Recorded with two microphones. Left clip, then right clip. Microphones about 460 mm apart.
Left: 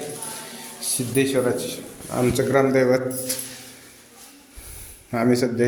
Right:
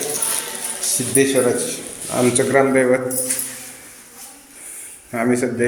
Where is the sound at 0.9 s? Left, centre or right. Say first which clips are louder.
Right 4 dB; left.